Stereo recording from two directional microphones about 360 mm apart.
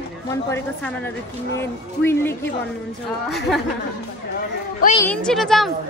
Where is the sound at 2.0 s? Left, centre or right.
Centre.